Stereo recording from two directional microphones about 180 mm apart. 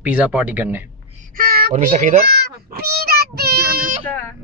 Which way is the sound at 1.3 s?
55° right (ahead or behind).